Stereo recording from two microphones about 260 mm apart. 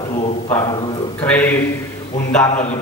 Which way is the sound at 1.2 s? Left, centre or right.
Centre.